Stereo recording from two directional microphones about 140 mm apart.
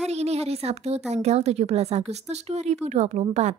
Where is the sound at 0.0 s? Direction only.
50° right (ahead or behind).